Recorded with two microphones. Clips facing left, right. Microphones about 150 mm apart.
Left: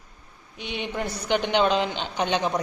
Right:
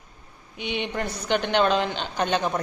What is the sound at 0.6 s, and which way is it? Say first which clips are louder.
A woman's voice: right 1 dB; centre (ahead or behind).